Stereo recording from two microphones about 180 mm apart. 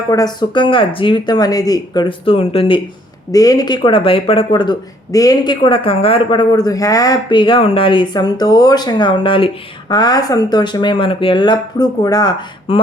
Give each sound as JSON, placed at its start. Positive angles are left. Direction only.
{"t": 0.1, "sound": "speech", "side_deg": 20}
{"t": 3.3, "sound": "speech", "side_deg": 20}